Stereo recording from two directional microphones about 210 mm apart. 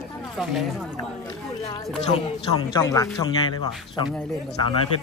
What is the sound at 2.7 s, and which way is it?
Speech, 15° left (ahead or behind).